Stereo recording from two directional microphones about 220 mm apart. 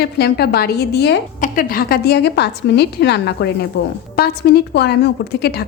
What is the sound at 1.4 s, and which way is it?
A woman's voice, 40° left (ahead or behind).